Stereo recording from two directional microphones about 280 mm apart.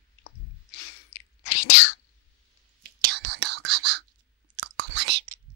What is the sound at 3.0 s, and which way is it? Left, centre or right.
Whispering, right.